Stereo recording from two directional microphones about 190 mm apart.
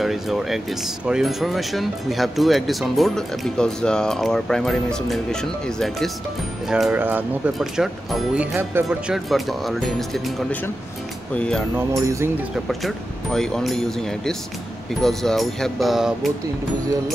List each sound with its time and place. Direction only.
0.0 s speech: centre (ahead or behind)
11.9 s speech: 15° right (ahead or behind)
12.6 s speech: centre (ahead or behind)